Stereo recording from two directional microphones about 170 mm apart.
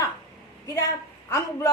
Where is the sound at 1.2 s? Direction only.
20° left (ahead or behind).